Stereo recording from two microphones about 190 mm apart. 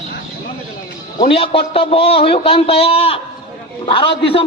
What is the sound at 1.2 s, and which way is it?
A man's voice, 30° left (ahead or behind).